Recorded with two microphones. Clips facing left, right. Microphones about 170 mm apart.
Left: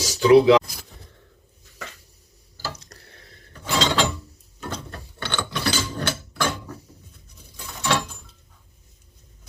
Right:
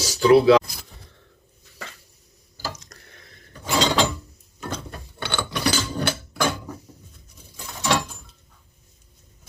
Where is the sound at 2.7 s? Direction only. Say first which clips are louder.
Even; 35° left (ahead or behind).